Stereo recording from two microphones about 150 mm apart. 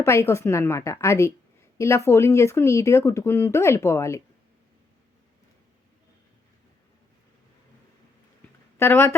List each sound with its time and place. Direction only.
0.0 s speech: 20° left (ahead or behind)
8.8 s speech: 15° left (ahead or behind)